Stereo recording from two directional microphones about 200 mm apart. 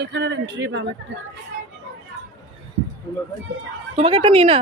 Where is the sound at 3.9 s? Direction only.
30° right (ahead or behind).